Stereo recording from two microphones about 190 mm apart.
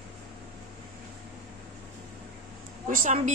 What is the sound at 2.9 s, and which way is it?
Speech, 45° right (ahead or behind).